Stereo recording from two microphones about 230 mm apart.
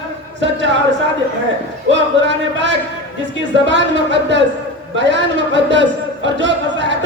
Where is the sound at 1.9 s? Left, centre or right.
Right.